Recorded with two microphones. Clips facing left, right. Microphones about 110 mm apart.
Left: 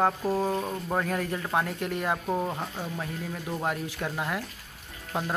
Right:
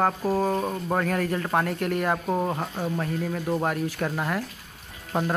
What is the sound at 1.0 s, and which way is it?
Speech, 15° left (ahead or behind).